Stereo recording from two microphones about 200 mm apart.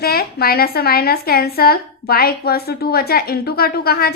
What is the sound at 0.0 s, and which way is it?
A woman's voice, 50° left (ahead or behind).